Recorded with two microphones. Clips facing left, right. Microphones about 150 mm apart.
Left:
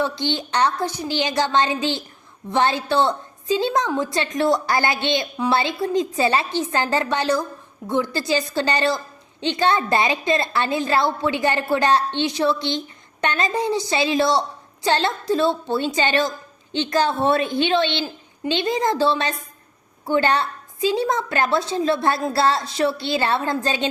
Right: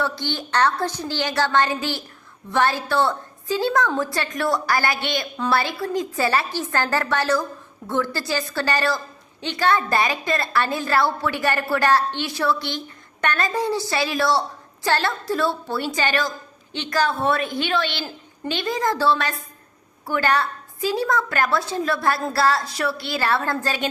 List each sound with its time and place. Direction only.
0.0 s a woman's voice: 20° left (ahead or behind)